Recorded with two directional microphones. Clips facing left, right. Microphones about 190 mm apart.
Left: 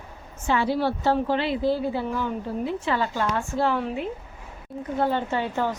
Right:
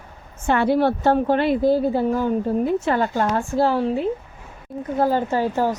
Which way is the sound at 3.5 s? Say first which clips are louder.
Right 5 dB; 35° right (ahead or behind).